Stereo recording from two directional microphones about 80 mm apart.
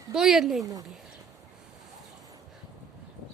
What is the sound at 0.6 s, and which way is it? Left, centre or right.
Speech, right.